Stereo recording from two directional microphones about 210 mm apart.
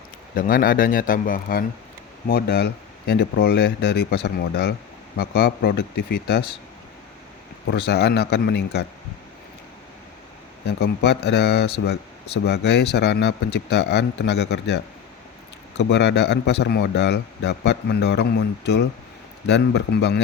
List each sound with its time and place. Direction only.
0.3 s a man's voice: 45° left (ahead or behind)
7.7 s a man's voice: 50° left (ahead or behind)
10.7 s a man's voice: 50° left (ahead or behind)
15.8 s a man's voice: 55° left (ahead or behind)